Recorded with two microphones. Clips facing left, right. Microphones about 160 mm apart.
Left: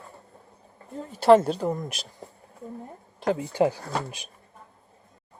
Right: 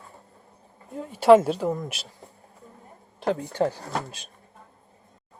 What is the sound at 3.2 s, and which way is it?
Speech, 5° left (ahead or behind).